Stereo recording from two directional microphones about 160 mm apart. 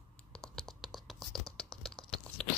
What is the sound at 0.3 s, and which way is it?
Scratch, 5° left (ahead or behind).